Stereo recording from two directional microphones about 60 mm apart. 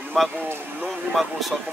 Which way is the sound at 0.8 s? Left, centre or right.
Centre.